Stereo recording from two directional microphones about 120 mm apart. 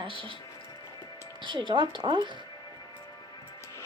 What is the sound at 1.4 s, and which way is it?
Speech, 45° right (ahead or behind).